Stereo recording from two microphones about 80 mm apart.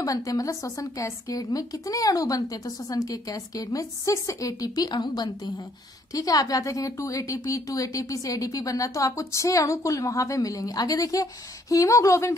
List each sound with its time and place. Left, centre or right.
0.0 s a woman's voice: left
6.1 s a woman's voice: left